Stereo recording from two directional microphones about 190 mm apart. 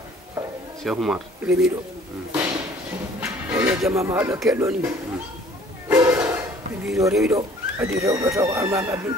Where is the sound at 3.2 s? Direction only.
10° right (ahead or behind).